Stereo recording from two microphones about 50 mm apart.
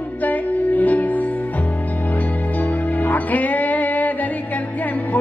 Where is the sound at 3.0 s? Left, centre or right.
Left.